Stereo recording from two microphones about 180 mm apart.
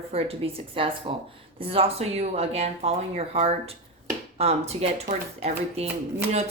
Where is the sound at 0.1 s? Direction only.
35° right (ahead or behind).